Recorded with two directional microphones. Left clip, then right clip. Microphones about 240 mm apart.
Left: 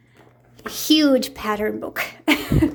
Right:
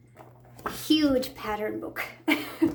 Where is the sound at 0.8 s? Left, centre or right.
Left.